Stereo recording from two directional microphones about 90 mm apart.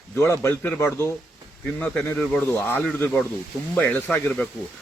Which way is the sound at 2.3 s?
10° left (ahead or behind).